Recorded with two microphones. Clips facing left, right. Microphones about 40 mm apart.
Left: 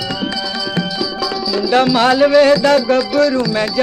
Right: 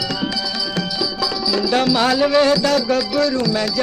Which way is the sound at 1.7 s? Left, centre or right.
Left.